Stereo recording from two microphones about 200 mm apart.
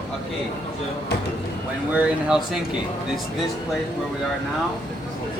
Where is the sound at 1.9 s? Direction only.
5° right (ahead or behind).